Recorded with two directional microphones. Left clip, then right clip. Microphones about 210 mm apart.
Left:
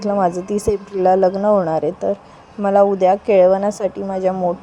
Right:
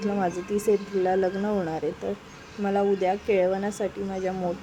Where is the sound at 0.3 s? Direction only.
25° left (ahead or behind).